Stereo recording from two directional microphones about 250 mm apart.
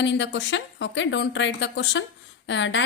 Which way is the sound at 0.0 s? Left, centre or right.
Left.